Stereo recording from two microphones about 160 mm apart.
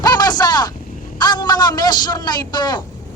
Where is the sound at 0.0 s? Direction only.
25° left (ahead or behind).